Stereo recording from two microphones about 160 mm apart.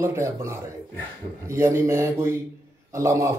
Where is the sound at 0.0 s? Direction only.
20° right (ahead or behind).